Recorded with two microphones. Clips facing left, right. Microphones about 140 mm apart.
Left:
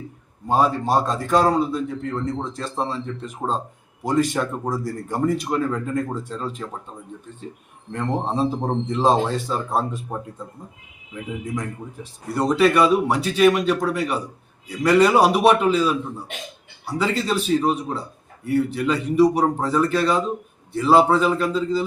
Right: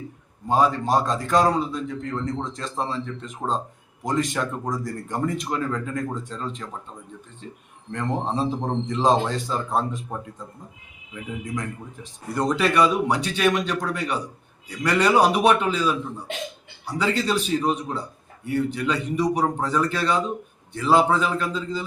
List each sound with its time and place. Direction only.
0.4 s a man's voice: 5° left (ahead or behind)
7.9 s a man's voice: 5° left (ahead or behind)
12.3 s a man's voice: 5° left (ahead or behind)
17.0 s a man's voice: centre (ahead or behind)